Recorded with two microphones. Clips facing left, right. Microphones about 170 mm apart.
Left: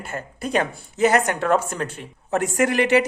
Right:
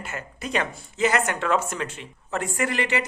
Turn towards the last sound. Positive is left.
turn(degrees=55)  # may be behind; listen again after turning